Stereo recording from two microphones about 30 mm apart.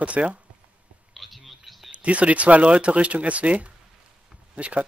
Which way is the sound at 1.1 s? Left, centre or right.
Centre.